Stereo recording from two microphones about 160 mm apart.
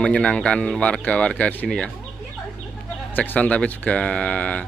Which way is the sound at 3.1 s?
10° left (ahead or behind).